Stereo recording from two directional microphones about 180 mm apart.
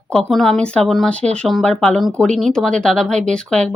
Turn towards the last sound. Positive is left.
turn(degrees=5)  # may be behind; listen again after turning